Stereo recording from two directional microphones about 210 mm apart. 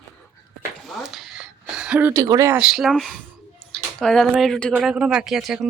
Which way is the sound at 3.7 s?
Centre (ahead or behind).